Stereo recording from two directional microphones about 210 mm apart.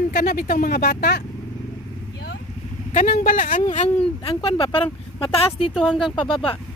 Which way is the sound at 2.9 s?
35° left (ahead or behind).